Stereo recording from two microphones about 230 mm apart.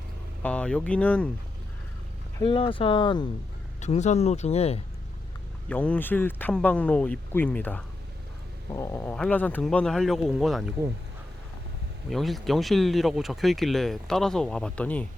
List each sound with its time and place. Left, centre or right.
0.4 s speech: centre
2.4 s speech: left
5.6 s speech: centre
12.0 s speech: centre